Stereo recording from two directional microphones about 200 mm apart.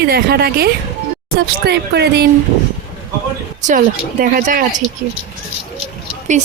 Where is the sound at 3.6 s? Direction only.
40° right (ahead or behind).